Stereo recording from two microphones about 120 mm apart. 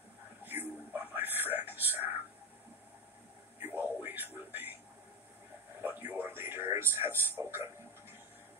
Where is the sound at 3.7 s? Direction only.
15° right (ahead or behind).